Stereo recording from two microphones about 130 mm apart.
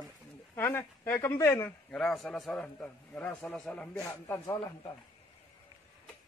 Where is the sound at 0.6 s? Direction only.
15° left (ahead or behind).